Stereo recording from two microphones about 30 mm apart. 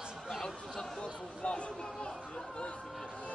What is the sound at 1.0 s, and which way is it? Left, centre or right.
Chatter, left.